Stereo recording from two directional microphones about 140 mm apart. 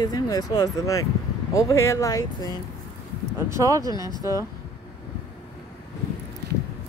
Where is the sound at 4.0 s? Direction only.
30° left (ahead or behind).